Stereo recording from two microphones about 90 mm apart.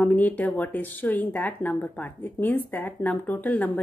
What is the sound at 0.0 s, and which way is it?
A woman's voice, 15° left (ahead or behind).